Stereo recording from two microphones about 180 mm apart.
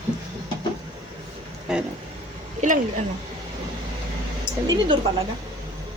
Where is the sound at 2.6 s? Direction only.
45° right (ahead or behind).